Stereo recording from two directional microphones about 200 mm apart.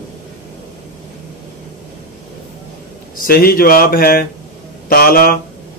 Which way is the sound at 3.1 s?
45° left (ahead or behind).